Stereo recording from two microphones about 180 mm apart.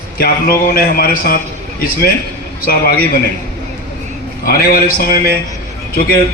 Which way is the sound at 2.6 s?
55° left (ahead or behind).